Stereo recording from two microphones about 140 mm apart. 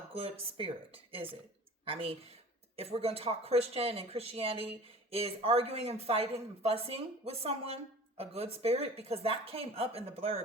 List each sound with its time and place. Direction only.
0.1 s a woman's voice: 45° right (ahead or behind)